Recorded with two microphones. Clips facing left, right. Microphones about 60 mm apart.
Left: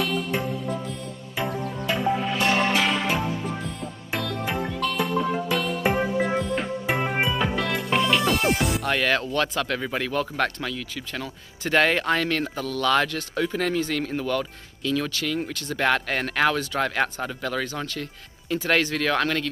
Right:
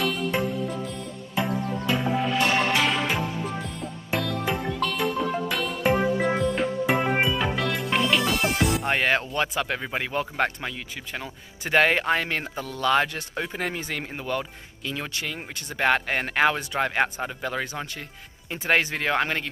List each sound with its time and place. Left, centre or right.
0.0 s music: centre
8.8 s speech: centre